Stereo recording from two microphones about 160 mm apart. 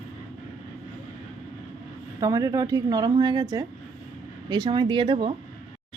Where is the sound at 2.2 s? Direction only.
20° right (ahead or behind).